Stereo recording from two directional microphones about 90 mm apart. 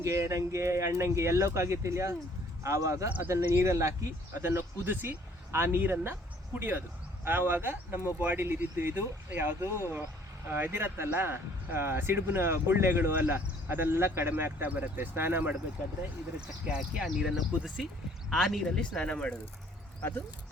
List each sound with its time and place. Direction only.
0.0 s speech: 35° right (ahead or behind)
16.6 s speech: 10° right (ahead or behind); by 19.4 s 10° left (ahead or behind)
20.0 s speech: 25° left (ahead or behind)